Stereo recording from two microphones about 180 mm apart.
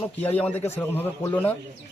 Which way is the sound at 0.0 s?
10° left (ahead or behind).